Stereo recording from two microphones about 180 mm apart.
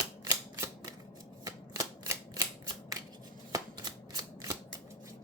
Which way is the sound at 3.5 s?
20° right (ahead or behind).